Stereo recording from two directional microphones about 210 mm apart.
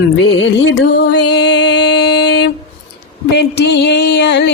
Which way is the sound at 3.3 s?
55° left (ahead or behind).